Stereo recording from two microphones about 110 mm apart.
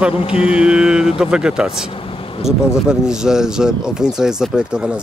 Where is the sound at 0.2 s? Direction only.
60° left (ahead or behind).